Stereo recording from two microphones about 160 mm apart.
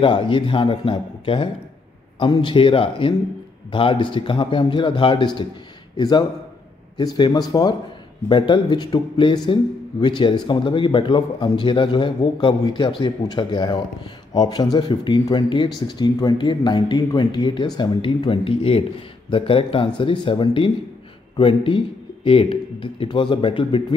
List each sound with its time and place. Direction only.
0.0 s speech: 30° left (ahead or behind)